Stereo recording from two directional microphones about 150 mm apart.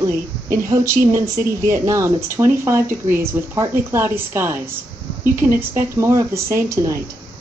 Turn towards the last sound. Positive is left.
turn(degrees=-20)  # may be behind; listen again after turning